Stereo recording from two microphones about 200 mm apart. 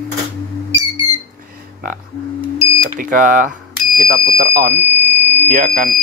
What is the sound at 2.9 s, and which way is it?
Speech, 40° right (ahead or behind).